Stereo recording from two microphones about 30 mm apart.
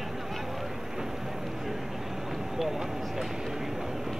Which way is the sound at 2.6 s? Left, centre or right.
Centre.